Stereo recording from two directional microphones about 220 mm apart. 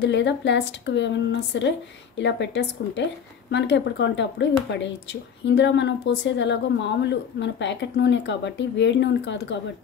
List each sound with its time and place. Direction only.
0.0 s a woman's voice: 55° left (ahead or behind)